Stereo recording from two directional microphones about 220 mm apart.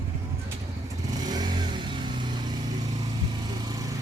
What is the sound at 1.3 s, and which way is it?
Vehicle, 20° right (ahead or behind).